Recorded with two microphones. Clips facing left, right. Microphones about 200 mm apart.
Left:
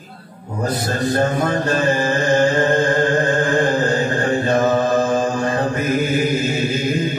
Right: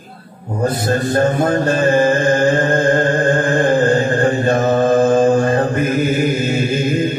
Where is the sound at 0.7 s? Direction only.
50° right (ahead or behind).